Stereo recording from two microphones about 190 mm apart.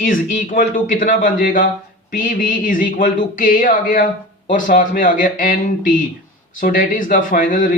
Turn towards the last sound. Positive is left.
turn(degrees=45)  # may be behind; listen again after turning